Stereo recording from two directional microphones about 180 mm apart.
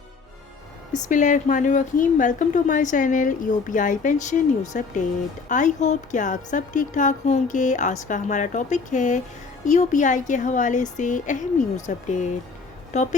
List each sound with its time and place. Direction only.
1.0 s a woman's voice: 45° left (ahead or behind)